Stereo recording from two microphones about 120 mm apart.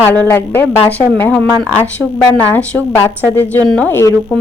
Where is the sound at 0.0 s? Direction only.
10° left (ahead or behind).